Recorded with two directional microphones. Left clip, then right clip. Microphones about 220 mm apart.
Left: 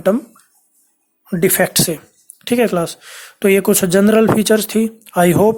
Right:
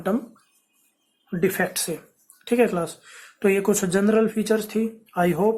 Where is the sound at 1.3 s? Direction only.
45° left (ahead or behind).